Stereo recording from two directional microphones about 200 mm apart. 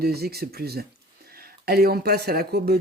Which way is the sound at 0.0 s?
50° right (ahead or behind).